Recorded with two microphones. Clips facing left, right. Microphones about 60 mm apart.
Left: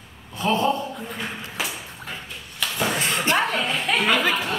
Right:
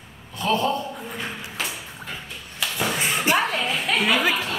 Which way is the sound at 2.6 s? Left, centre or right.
Centre.